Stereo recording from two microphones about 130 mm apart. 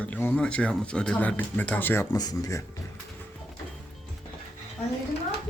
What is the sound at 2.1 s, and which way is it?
Speech, 30° left (ahead or behind).